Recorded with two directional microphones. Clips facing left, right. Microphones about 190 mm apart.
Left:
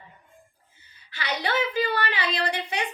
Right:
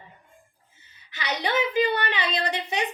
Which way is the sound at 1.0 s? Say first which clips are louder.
Right 1 dB; 20° right (ahead or behind).